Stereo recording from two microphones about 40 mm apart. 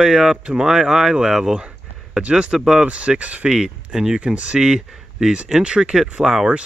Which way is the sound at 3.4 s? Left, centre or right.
Centre.